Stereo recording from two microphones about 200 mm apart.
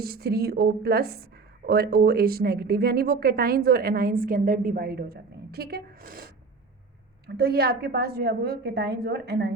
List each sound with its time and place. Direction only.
0.0 s a woman's voice: 50° right (ahead or behind)